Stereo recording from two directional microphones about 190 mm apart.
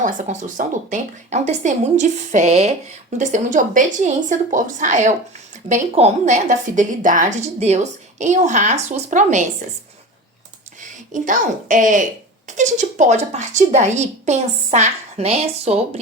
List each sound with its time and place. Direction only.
0.0 s a woman's voice: 45° right (ahead or behind)
10.8 s a woman's voice: 40° right (ahead or behind)